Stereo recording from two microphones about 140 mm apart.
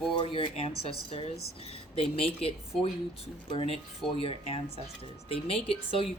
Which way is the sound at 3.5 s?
45° left (ahead or behind).